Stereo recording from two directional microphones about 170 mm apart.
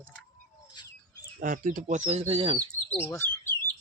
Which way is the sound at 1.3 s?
50° right (ahead or behind).